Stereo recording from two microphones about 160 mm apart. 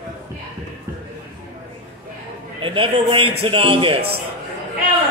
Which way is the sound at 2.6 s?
35° right (ahead or behind).